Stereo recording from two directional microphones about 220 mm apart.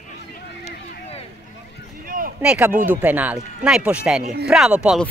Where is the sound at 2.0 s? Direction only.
40° right (ahead or behind).